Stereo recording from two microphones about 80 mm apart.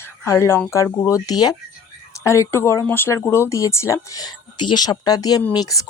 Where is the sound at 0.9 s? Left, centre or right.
Left.